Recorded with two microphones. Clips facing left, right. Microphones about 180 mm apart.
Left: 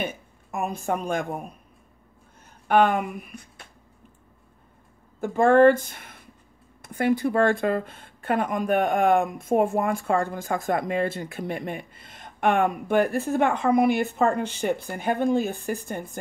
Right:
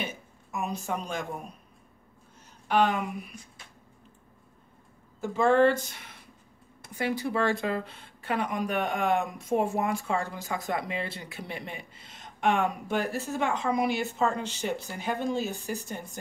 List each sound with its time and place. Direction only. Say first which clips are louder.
0.0 s a sound: left 5 dB; 55° left (ahead or behind)
2.7 s speech: left 5 dB; 55° left (ahead or behind)
5.2 s speech: left 6 dB; 55° left (ahead or behind)